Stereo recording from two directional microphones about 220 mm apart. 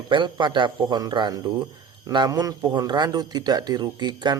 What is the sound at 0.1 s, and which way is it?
Speech, 20° right (ahead or behind).